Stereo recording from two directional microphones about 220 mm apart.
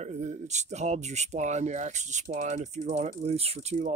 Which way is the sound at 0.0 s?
30° right (ahead or behind).